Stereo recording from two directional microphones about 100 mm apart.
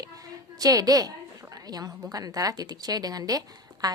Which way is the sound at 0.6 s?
40° right (ahead or behind).